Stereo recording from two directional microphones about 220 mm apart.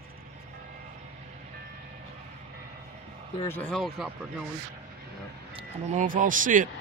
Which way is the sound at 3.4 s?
10° left (ahead or behind).